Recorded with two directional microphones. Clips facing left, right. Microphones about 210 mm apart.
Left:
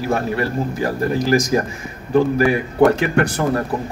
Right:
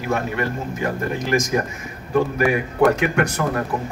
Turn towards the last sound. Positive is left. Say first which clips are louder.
# left 3 dB
turn(degrees=30)  # may be behind; listen again after turning